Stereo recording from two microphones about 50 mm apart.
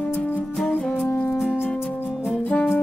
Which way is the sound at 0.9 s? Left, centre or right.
Left.